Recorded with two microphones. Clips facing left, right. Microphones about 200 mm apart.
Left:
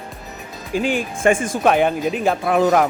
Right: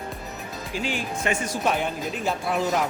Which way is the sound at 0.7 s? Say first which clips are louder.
Left 8 dB; 50° left (ahead or behind).